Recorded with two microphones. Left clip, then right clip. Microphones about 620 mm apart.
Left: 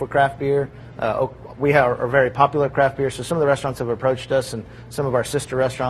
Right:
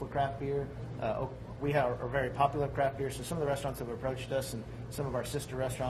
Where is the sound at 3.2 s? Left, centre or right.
Left.